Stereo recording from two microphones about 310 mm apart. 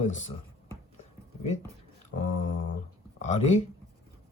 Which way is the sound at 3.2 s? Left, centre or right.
Left.